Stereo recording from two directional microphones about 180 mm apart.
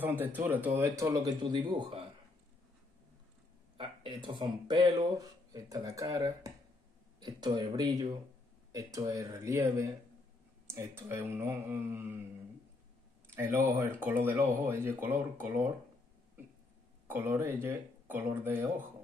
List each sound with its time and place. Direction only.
0.0 s speech: 10° right (ahead or behind); by 2.0 s 25° right (ahead or behind)
3.7 s speech: 30° right (ahead or behind); by 12.1 s 10° right (ahead or behind)
13.3 s speech: 15° right (ahead or behind)
17.1 s speech: 10° right (ahead or behind)